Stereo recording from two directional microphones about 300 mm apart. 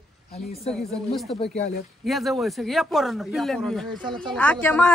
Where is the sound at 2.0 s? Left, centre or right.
Centre.